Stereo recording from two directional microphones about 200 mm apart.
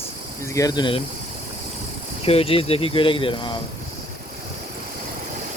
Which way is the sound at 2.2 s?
30° left (ahead or behind).